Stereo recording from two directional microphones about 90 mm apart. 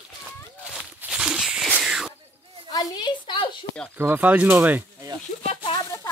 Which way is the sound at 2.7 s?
45° left (ahead or behind).